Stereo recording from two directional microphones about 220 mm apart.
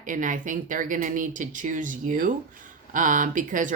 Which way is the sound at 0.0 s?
35° right (ahead or behind).